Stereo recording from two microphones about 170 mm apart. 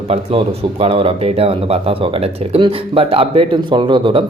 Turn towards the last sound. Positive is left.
turn(degrees=-30)  # may be behind; listen again after turning